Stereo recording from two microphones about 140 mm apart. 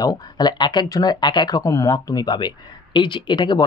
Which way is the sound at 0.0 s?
30° left (ahead or behind).